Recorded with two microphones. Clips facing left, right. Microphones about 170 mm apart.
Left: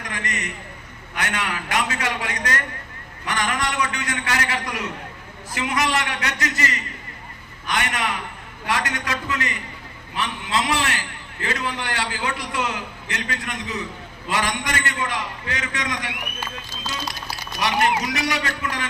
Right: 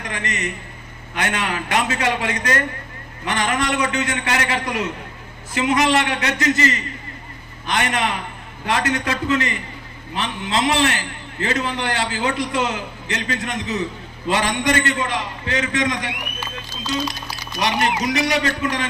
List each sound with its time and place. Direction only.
0.1 s a man's voice: 25° right (ahead or behind)
17.6 s a man's voice: 25° right (ahead or behind)